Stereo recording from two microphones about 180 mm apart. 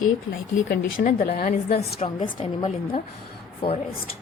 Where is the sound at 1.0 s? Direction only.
55° left (ahead or behind); by 3.8 s 30° left (ahead or behind).